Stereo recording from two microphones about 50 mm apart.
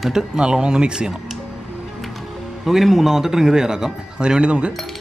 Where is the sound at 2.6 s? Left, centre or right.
Centre.